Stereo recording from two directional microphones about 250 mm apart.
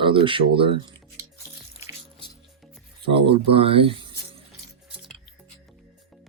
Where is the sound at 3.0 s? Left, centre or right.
Right.